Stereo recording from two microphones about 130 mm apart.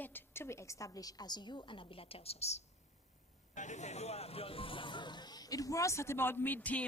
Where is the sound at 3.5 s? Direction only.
65° left (ahead or behind).